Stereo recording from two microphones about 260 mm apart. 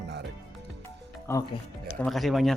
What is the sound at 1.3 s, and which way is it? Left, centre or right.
Speech, centre.